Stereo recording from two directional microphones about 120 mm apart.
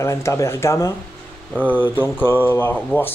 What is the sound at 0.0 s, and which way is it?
Speech, 25° left (ahead or behind).